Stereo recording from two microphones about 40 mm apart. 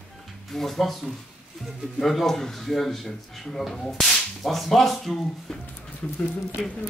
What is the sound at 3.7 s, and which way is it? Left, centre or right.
Speech, centre.